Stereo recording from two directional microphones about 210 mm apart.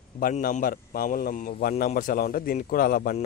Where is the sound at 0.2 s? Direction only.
40° left (ahead or behind).